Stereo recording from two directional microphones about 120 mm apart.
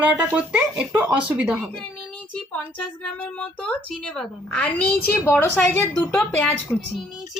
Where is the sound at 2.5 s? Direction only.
10° left (ahead or behind).